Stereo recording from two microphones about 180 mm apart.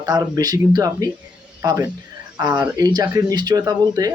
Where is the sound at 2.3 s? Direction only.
25° right (ahead or behind).